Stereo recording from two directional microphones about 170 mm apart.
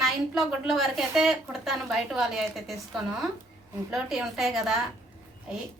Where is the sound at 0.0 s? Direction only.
Centre (ahead or behind).